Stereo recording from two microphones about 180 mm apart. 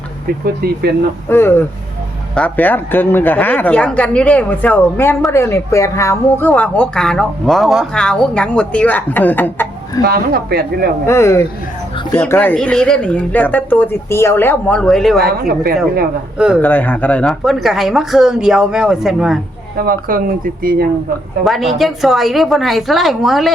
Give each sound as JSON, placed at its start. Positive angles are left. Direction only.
{"t": 1.3, "sound": "speech", "side_deg": 10}
{"t": 10.0, "sound": "speech", "side_deg": -55}
{"t": 11.0, "sound": "speech", "side_deg": 15}
{"t": 15.2, "sound": "speech", "side_deg": -55}
{"t": 16.6, "sound": "speech", "side_deg": 10}
{"t": 19.8, "sound": "speech", "side_deg": -55}
{"t": 21.4, "sound": "speech", "side_deg": 0}